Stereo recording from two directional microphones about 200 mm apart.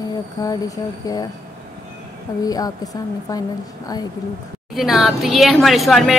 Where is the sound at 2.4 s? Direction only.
20° left (ahead or behind).